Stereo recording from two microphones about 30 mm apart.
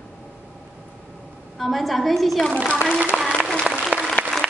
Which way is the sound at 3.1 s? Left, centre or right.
Left.